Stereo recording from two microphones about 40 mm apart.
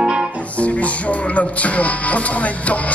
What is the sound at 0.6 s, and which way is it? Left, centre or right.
Music, left.